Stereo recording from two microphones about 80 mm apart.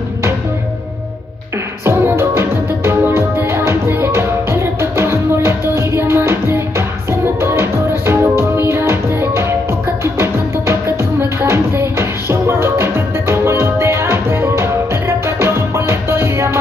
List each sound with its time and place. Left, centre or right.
1.9 s music: right